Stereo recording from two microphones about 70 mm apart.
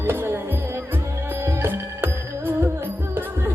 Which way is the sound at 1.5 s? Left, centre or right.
Right.